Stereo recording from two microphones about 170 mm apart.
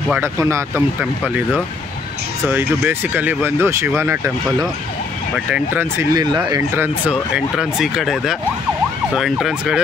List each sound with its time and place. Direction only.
0.1 s speech: 15° right (ahead or behind)
2.4 s speech: 10° right (ahead or behind)
5.3 s speech: 10° right (ahead or behind)
6.1 s speech: 25° right (ahead or behind)
6.8 s speech: 5° right (ahead or behind)